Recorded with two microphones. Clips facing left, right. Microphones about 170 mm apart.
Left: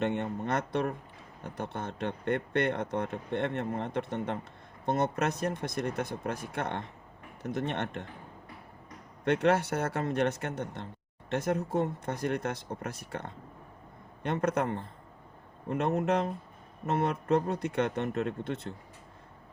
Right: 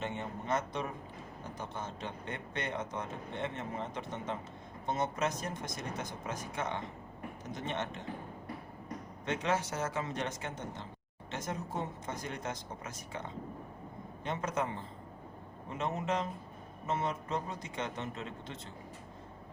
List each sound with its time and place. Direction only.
0.0 s speech: 65° left (ahead or behind)
9.2 s speech: 60° left (ahead or behind)